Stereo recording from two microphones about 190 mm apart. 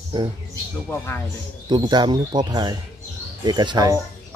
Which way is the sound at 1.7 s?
25° right (ahead or behind).